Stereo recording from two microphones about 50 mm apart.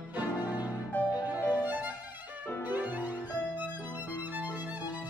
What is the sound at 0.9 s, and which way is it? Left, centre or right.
Music, left.